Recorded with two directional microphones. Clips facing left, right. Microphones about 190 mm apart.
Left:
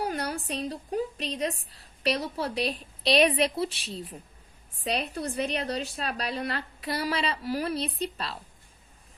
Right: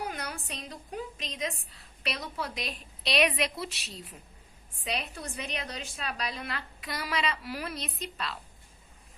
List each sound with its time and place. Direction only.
0.0 s a woman's voice: 35° left (ahead or behind)